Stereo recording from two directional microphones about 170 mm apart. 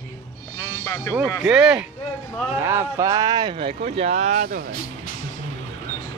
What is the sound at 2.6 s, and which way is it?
Speech, 15° right (ahead or behind).